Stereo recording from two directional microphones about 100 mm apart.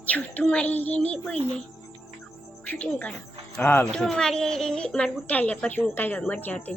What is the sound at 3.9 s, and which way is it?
Speech, 5° left (ahead or behind).